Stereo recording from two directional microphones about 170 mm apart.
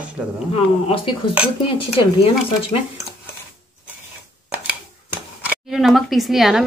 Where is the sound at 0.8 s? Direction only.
30° left (ahead or behind).